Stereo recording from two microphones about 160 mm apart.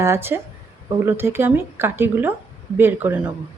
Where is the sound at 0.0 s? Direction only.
15° right (ahead or behind).